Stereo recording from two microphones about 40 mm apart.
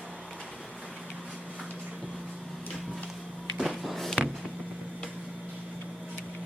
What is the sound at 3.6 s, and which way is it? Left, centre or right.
Music, centre.